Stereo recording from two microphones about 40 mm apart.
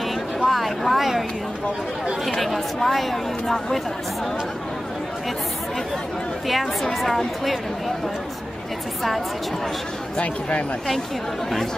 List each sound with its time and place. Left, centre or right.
0.4 s a sound: centre
2.3 s a woman's voice: centre
6.5 s a woman's voice: centre